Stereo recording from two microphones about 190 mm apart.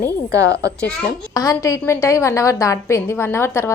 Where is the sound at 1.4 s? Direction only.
15° left (ahead or behind).